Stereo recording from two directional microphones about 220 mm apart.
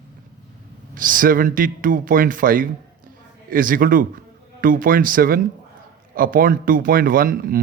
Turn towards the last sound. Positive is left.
turn(degrees=-40)  # may be behind; listen again after turning